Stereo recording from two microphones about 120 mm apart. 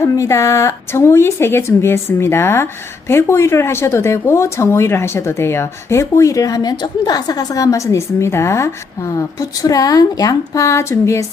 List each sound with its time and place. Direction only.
0.0 s speech: 25° left (ahead or behind)